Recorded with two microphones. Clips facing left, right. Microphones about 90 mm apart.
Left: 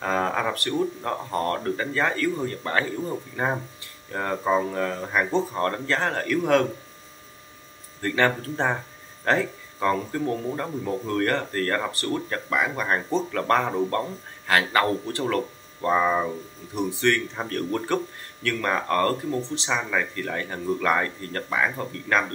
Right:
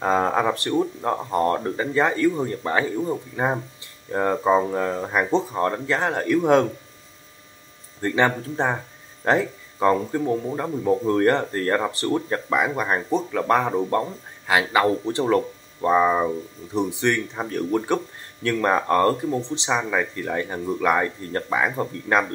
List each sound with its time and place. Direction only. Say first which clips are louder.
0.0 s speech: right 4 dB; 20° right (ahead or behind)
8.0 s a man's voice: right 2 dB; 15° right (ahead or behind)
15.0 s speech: right 5 dB; 20° right (ahead or behind)